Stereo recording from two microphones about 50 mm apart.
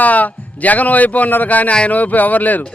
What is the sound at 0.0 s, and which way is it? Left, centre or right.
A man's voice, left.